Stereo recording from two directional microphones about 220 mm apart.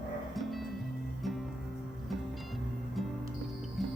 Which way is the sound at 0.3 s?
Centre (ahead or behind).